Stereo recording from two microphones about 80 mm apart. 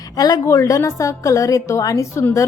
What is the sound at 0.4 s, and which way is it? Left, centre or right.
A woman's voice, left.